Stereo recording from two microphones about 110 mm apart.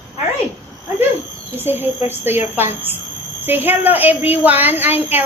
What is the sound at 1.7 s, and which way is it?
A woman's voice, 20° right (ahead or behind).